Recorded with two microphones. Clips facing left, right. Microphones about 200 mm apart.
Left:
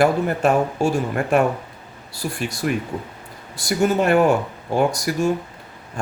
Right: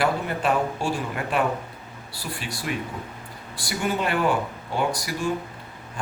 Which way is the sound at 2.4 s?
50° left (ahead or behind).